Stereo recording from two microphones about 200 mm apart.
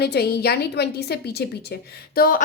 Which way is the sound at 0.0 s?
55° left (ahead or behind).